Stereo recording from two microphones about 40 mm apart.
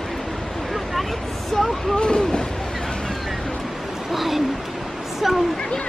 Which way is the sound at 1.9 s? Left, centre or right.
Left.